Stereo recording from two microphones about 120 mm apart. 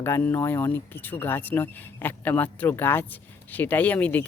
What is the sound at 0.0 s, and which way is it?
Speech, 20° left (ahead or behind).